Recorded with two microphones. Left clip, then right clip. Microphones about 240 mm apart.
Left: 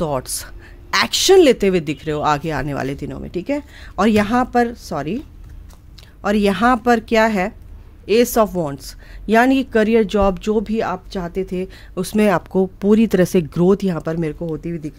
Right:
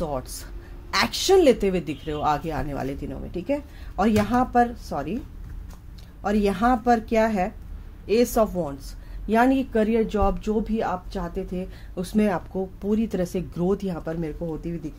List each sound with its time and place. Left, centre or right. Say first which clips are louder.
0.0 s speech: left 7 dB; left
6.2 s speech: left 6 dB; left